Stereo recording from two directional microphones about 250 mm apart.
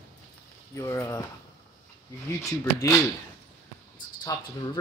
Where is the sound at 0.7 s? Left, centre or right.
Centre.